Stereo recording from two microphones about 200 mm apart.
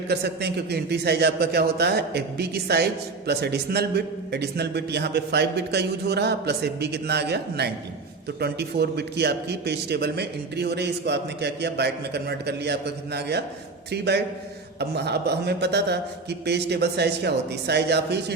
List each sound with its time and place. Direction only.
0.1 s a man's voice: 55° right (ahead or behind)